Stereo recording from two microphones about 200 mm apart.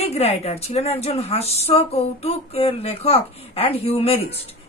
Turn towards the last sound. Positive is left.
turn(degrees=30)  # may be behind; listen again after turning